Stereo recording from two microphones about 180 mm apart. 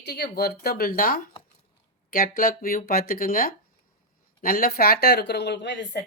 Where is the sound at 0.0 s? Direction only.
65° left (ahead or behind).